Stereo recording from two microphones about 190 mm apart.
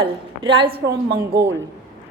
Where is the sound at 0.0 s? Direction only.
25° right (ahead or behind).